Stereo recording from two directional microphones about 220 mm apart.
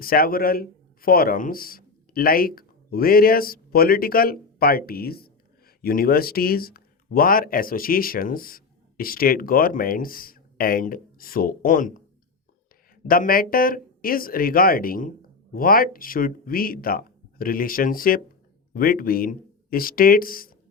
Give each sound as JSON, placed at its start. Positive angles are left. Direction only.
{"t": 0.0, "sound": "a man's voice", "side_deg": 40}
{"t": 13.1, "sound": "speech", "side_deg": 40}